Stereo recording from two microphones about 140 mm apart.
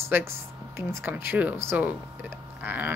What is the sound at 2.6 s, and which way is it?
Livestock, 15° right (ahead or behind).